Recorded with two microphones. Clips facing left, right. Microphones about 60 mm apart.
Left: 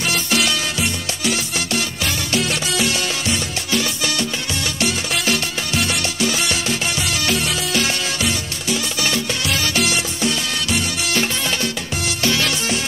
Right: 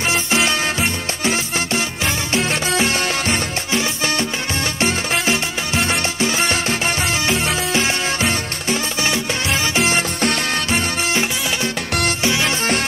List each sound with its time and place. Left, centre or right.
0.1 s music: right
9.0 s music: right
9.9 s music: right
12.2 s music: right